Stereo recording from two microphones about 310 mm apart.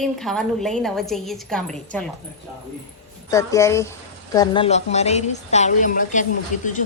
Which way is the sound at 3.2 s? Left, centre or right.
Centre.